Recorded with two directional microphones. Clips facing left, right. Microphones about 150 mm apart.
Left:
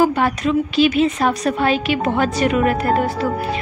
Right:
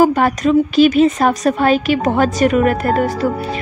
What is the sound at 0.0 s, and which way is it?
A woman's voice, 45° right (ahead or behind).